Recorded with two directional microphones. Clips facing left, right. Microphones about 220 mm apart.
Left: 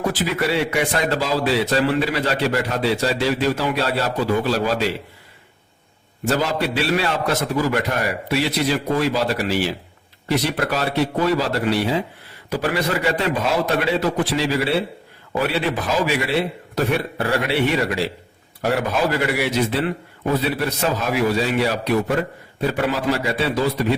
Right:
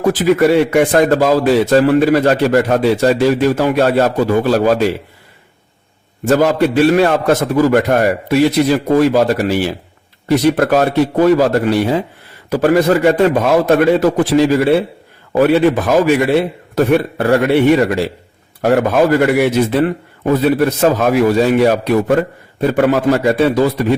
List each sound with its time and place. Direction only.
0.0 s speech: 50° right (ahead or behind)
6.2 s speech: 50° right (ahead or behind)